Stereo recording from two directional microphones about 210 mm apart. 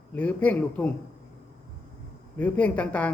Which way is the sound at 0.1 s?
5° left (ahead or behind).